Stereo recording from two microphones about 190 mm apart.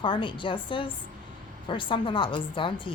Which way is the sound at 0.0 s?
25° left (ahead or behind).